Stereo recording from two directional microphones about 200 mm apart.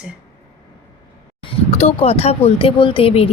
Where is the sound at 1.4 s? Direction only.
30° left (ahead or behind).